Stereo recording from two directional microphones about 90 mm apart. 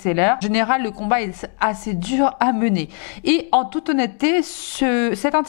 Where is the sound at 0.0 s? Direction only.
15° left (ahead or behind).